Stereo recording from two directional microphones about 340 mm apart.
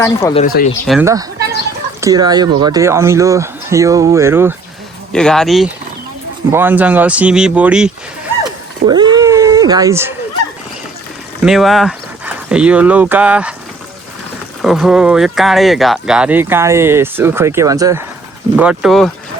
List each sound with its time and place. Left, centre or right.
0.0 s speech: centre
0.4 s speech: left
0.9 s speech: centre
8.8 s a sound: centre
11.4 s speech: centre
14.6 s speech: centre